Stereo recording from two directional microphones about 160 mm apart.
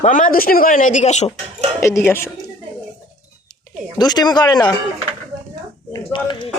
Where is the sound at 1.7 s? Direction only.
15° left (ahead or behind).